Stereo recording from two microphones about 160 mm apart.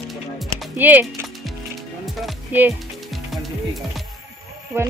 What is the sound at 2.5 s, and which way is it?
Speech, 10° right (ahead or behind).